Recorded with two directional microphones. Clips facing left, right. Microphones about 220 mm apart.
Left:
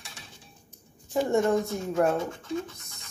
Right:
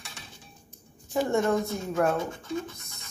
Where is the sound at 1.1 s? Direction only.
15° left (ahead or behind).